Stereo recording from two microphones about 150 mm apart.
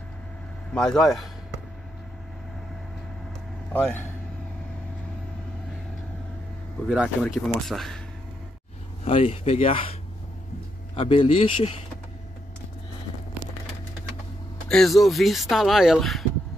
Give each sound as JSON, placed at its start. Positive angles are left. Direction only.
{"t": 0.7, "sound": "speech", "side_deg": 5}
{"t": 6.9, "sound": "speech", "side_deg": -5}
{"t": 9.0, "sound": "speech", "side_deg": 40}
{"t": 11.0, "sound": "speech", "side_deg": 40}
{"t": 14.7, "sound": "speech", "side_deg": 0}